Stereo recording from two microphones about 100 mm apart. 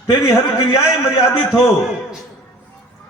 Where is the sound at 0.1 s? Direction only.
30° left (ahead or behind).